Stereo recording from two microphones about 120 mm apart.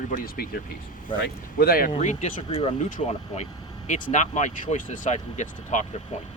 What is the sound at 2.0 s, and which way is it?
Speech, 80° left.